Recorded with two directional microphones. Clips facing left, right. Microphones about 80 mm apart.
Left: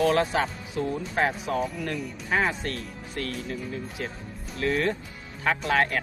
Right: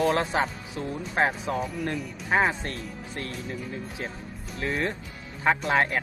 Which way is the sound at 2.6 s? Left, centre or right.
Right.